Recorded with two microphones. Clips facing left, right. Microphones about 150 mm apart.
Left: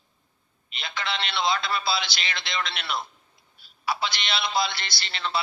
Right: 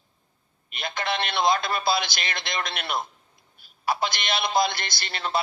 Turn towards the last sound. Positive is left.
turn(degrees=-45)  # may be behind; listen again after turning